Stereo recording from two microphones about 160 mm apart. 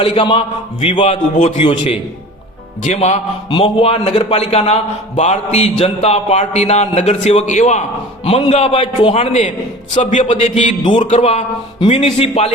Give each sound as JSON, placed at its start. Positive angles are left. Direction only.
{"t": 0.0, "sound": "a man's voice", "side_deg": 35}
{"t": 2.8, "sound": "a man's voice", "side_deg": 45}
{"t": 10.8, "sound": "a man's voice", "side_deg": 30}
{"t": 11.1, "sound": "a man's voice", "side_deg": 45}